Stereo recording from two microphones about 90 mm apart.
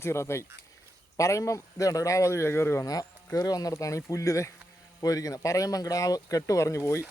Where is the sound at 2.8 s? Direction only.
40° left (ahead or behind).